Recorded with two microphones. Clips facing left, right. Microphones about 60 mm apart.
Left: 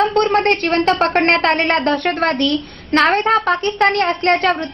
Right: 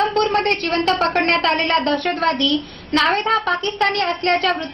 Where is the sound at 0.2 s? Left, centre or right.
Left.